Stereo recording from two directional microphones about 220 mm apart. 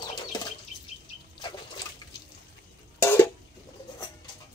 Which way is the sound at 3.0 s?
10° left (ahead or behind).